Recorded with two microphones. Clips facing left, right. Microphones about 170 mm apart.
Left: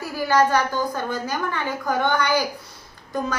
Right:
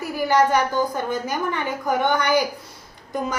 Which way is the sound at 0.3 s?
20° right (ahead or behind).